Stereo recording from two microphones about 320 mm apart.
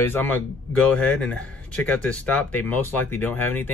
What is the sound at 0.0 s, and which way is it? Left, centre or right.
A man's voice, centre.